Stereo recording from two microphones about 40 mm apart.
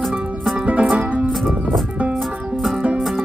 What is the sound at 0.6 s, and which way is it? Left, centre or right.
Music, right.